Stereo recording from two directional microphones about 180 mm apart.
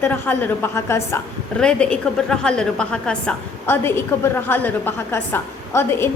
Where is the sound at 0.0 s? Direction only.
10° left (ahead or behind).